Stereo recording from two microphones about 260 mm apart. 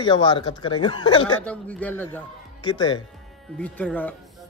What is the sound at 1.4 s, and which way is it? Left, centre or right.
A man's voice, centre.